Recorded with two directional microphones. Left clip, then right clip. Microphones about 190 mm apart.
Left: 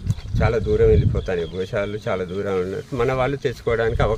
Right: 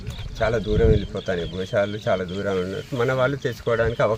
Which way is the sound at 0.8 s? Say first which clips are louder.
Left 4 dB; 30° left (ahead or behind).